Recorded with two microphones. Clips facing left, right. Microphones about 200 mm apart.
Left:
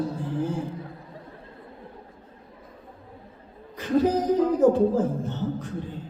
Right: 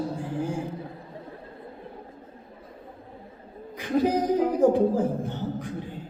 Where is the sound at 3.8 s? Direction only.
15° right (ahead or behind).